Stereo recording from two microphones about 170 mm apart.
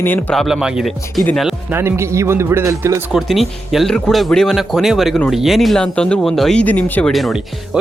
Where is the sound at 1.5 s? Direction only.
15° right (ahead or behind).